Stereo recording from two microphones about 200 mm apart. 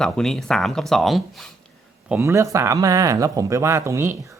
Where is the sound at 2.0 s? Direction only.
10° right (ahead or behind).